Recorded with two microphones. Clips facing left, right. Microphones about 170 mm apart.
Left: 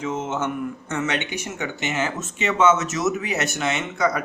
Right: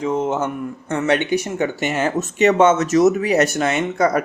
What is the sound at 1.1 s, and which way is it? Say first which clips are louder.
A man's voice: right 9 dB; 45° right (ahead or behind).